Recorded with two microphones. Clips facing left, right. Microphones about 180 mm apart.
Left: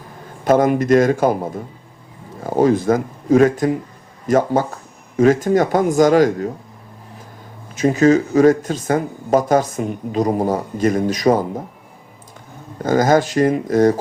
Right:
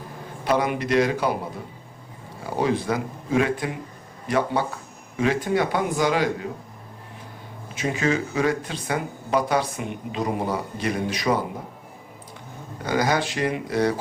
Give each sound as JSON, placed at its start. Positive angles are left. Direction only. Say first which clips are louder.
{"t": 0.4, "sound": "speech", "louder": "left 9 dB", "side_deg": 45}
{"t": 7.8, "sound": "speech", "louder": "left 10 dB", "side_deg": 40}
{"t": 12.8, "sound": "speech", "louder": "left 8 dB", "side_deg": 45}